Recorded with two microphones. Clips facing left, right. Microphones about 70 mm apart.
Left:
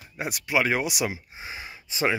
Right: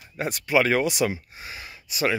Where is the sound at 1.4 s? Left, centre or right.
Left.